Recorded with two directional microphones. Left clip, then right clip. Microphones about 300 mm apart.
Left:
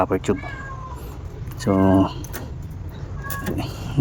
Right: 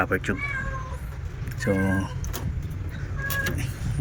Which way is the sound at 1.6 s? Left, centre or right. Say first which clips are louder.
Left 7 dB; centre.